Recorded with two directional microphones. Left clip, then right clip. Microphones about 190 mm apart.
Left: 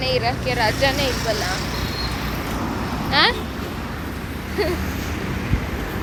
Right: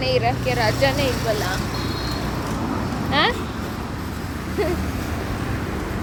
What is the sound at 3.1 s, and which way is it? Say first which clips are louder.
Speech: left 2 dB; 10° right (ahead or behind).